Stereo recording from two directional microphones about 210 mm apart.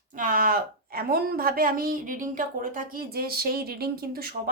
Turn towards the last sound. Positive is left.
turn(degrees=-45)  # may be behind; listen again after turning